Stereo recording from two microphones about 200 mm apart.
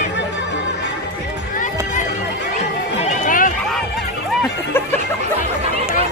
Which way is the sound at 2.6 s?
40° left (ahead or behind).